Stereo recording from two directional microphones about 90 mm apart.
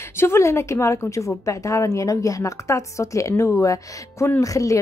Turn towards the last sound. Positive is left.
turn(degrees=40)  # may be behind; listen again after turning